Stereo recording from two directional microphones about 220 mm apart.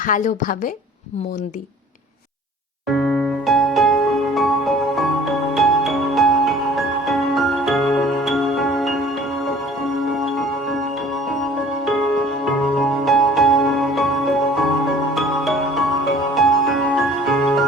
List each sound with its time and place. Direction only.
0.0 s a woman's voice: 35° left (ahead or behind)
2.9 s music: centre (ahead or behind)
13.1 s music: centre (ahead or behind)